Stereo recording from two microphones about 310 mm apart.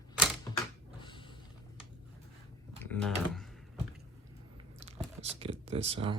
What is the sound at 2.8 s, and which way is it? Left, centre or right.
Speech, centre.